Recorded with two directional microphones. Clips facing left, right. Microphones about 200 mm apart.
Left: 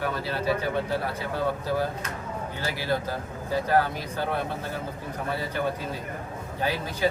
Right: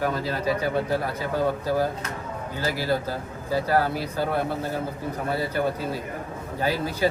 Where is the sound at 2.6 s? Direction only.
40° right (ahead or behind).